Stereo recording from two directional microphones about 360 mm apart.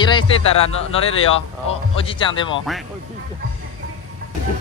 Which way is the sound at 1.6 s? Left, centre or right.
Centre.